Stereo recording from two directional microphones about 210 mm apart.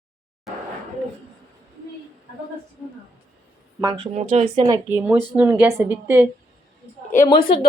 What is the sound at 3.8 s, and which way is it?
A woman's voice, 25° right (ahead or behind).